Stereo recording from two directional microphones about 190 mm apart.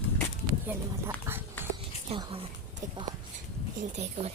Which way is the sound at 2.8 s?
15° right (ahead or behind).